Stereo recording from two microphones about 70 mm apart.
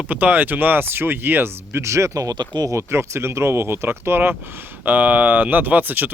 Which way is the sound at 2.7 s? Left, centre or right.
Right.